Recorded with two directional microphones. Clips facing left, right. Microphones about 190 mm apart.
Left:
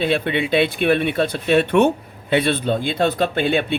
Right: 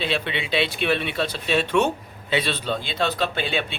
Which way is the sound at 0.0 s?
50° left (ahead or behind).